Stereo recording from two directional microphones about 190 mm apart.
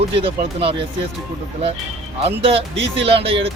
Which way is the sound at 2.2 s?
30° right (ahead or behind).